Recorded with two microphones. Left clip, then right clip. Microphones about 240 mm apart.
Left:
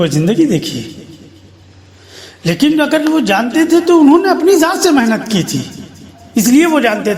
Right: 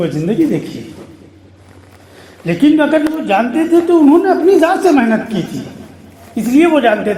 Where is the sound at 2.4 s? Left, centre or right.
Left.